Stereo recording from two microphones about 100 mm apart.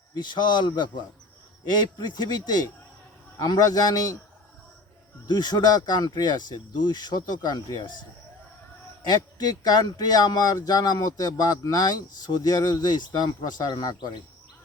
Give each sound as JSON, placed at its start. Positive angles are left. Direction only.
{"t": 0.2, "sound": "a man's voice", "side_deg": 50}
{"t": 5.3, "sound": "speech", "side_deg": 45}
{"t": 9.0, "sound": "speech", "side_deg": 40}